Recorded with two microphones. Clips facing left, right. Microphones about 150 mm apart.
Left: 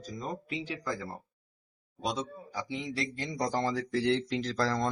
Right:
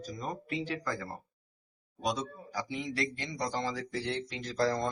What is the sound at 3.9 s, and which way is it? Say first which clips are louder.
Speech: left 7 dB; 90° left.